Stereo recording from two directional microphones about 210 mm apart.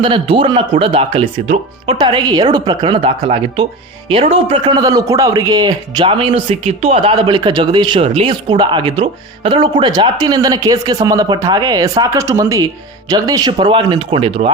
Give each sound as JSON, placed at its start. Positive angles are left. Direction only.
{"t": 0.0, "sound": "speech", "side_deg": -25}